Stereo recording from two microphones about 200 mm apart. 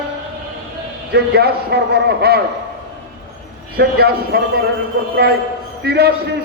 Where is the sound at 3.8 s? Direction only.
55° right (ahead or behind).